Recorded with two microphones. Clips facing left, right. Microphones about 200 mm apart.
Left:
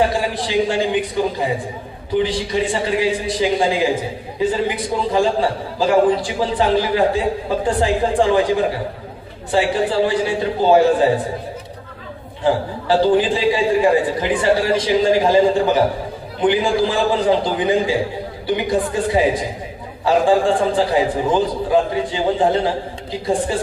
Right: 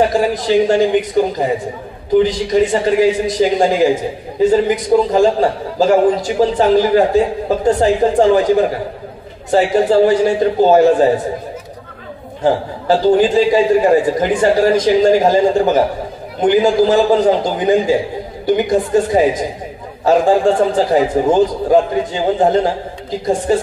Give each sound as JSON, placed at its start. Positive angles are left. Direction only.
{"t": 0.3, "sound": "a man's voice", "side_deg": -45}
{"t": 9.5, "sound": "a man's voice", "side_deg": -45}
{"t": 12.4, "sound": "a man's voice", "side_deg": -45}